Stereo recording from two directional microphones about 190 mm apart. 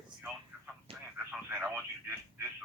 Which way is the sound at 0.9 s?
30° right (ahead or behind).